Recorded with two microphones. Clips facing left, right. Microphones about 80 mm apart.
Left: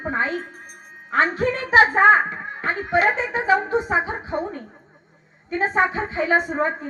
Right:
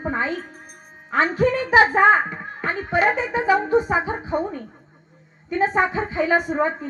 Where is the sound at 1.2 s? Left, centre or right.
Centre.